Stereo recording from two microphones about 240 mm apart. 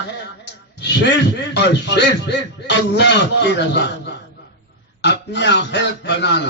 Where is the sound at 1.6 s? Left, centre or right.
Left.